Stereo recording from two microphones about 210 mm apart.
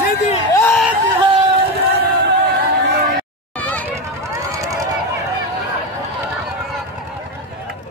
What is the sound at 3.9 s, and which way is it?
Run, 15° right (ahead or behind).